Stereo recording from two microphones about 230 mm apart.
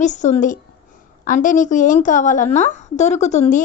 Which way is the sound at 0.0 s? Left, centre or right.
Left.